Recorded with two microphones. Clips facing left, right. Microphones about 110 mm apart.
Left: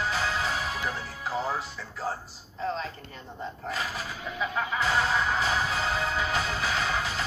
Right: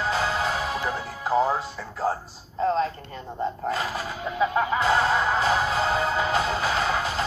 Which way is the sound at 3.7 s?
40° right (ahead or behind).